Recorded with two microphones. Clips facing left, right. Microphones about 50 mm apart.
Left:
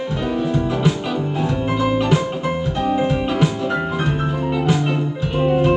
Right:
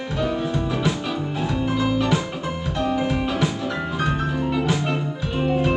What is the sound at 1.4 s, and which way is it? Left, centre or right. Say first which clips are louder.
Music: left 2 dB; left.